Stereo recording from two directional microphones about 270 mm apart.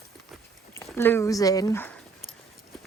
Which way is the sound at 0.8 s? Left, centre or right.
Centre.